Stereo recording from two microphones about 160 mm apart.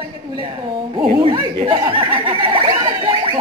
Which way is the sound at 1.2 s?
30° right (ahead or behind).